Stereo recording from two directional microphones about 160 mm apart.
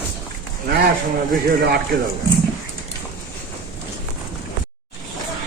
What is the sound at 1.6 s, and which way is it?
Speech, 75° right (ahead or behind).